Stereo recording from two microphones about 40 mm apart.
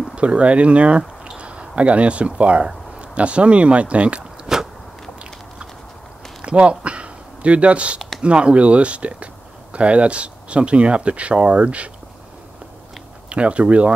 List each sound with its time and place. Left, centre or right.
0.1 s speech: right
4.5 s walk: centre
6.4 s a sound: right
8.2 s speech: right
13.3 s speech: right